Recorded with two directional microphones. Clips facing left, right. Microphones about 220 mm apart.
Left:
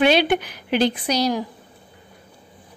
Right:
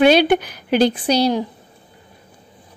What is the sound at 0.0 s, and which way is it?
A woman's voice, 40° right (ahead or behind).